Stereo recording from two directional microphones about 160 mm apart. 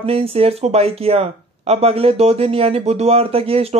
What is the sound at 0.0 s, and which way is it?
Speech, 35° right (ahead or behind).